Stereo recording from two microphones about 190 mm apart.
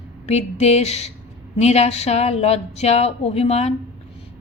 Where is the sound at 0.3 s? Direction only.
35° left (ahead or behind).